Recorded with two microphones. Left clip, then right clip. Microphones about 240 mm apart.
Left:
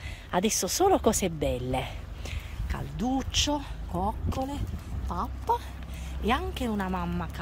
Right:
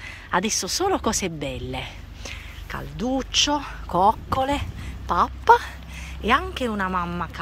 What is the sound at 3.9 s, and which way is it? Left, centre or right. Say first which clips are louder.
Speech: right 13 dB; right.